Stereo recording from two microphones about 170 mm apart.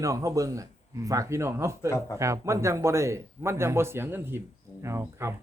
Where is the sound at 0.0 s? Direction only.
20° right (ahead or behind).